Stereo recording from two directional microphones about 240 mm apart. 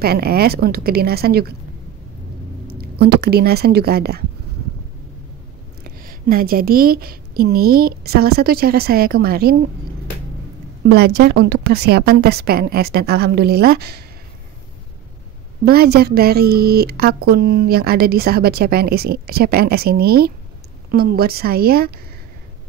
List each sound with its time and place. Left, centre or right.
0.0 s speech: right
2.7 s speech: right
5.9 s speech: right
10.9 s speech: right
15.6 s speech: right